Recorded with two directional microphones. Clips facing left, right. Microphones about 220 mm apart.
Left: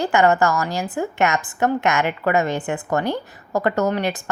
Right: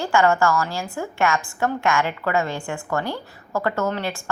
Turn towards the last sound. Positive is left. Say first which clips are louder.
# left 3 dB
turn(degrees=20)  # may be behind; listen again after turning